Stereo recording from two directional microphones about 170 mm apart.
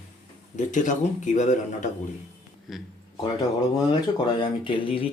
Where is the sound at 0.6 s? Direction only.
45° left (ahead or behind).